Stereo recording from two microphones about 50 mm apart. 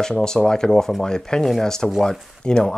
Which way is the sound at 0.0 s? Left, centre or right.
Centre.